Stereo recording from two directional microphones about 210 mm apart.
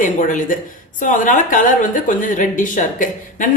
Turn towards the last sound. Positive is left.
turn(degrees=40)  # may be behind; listen again after turning